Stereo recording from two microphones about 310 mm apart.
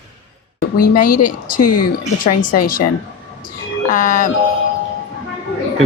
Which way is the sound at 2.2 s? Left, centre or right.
Left.